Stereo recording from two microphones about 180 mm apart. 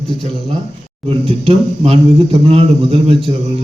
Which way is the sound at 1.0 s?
30° right (ahead or behind).